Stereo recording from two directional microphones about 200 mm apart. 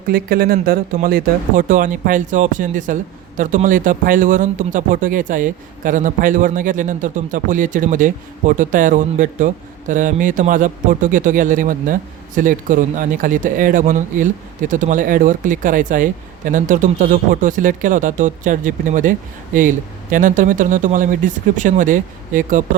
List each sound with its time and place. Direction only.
0.1 s speech: 45° right (ahead or behind)